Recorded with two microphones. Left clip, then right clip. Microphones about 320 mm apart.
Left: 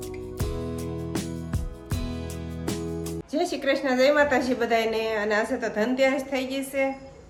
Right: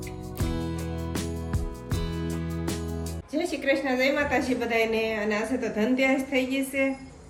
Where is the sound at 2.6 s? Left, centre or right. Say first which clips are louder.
Left 4 dB; centre.